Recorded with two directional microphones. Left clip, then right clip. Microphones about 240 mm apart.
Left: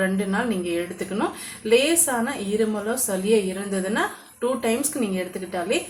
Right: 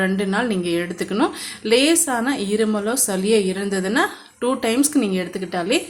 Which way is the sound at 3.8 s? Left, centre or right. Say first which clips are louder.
Right 4 dB; right.